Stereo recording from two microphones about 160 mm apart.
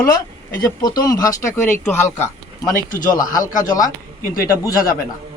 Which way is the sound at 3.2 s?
20° left (ahead or behind).